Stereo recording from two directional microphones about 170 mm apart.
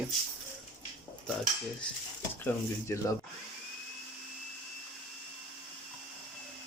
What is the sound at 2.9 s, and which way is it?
Speech, 15° left (ahead or behind).